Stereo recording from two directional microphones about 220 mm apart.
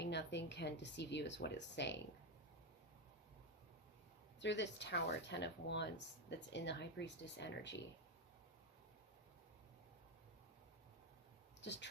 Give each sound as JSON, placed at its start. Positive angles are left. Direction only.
{"t": 0.0, "sound": "speech", "side_deg": 50}
{"t": 4.4, "sound": "speech", "side_deg": 55}
{"t": 11.6, "sound": "speech", "side_deg": 55}